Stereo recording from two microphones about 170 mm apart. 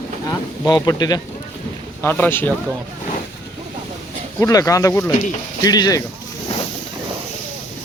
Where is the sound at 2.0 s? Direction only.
10° left (ahead or behind).